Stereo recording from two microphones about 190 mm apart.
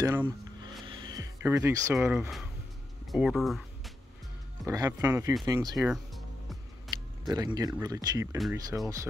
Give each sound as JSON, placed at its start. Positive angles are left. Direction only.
{"t": 0.0, "sound": "speech", "side_deg": -10}
{"t": 4.6, "sound": "speech", "side_deg": -20}
{"t": 5.8, "sound": "music", "side_deg": 0}
{"t": 6.9, "sound": "speech", "side_deg": -20}